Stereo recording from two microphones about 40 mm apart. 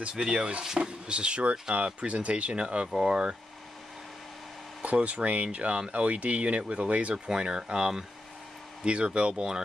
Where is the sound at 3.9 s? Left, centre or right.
Centre.